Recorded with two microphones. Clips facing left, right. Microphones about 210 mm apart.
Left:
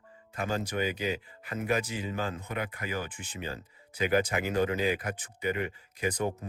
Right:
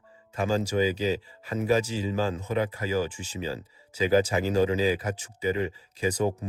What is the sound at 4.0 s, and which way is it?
Speech, 35° right (ahead or behind).